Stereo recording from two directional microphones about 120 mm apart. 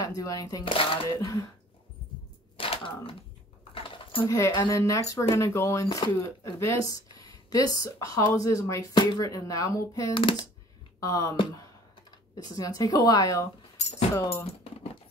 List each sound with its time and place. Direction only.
0.0 s speech: 30° left (ahead or behind)
2.5 s speech: 50° left (ahead or behind)
3.7 s a sound: 45° left (ahead or behind)
4.5 s speech: 30° left (ahead or behind)
8.9 s speech: 35° left (ahead or behind)
10.1 s a child's voice: 45° left (ahead or behind)
11.0 s speech: 30° left (ahead or behind)
12.5 s speech: 30° left (ahead or behind)
13.7 s a sound: 65° left (ahead or behind)
14.1 s speech: 25° left (ahead or behind)
14.4 s a sound: 60° left (ahead or behind)